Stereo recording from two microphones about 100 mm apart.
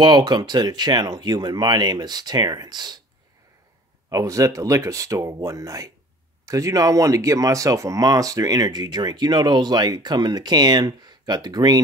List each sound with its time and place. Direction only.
0.0 s speech: 45° right (ahead or behind)
4.1 s speech: 35° right (ahead or behind)